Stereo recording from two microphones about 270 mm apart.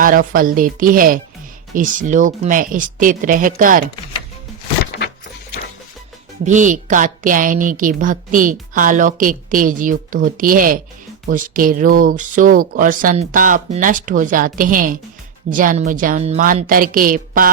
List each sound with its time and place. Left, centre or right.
0.0 s a woman's voice: right
6.4 s a woman's voice: right